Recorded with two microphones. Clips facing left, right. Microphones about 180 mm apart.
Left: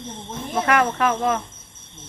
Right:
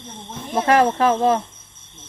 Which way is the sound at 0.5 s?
30° right (ahead or behind).